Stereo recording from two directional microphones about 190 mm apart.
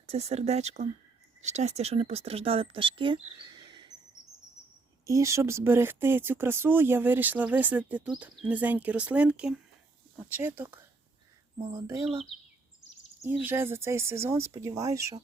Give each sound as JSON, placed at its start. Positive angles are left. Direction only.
{"t": 0.1, "sound": "speech", "side_deg": -35}
{"t": 5.0, "sound": "speech", "side_deg": -15}
{"t": 13.2, "sound": "speech", "side_deg": -10}